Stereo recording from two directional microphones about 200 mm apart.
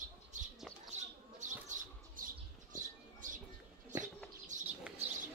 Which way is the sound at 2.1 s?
40° right (ahead or behind).